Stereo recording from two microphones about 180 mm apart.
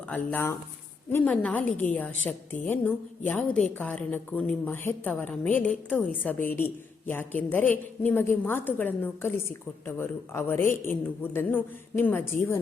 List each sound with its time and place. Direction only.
0.1 s a woman's voice: 10° left (ahead or behind)